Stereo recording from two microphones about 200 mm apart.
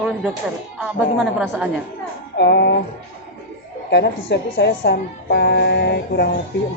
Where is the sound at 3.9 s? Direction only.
60° left (ahead or behind).